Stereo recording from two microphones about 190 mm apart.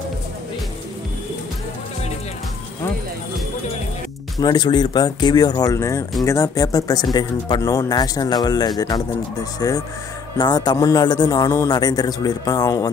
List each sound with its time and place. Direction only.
4.4 s speech: 20° left (ahead or behind)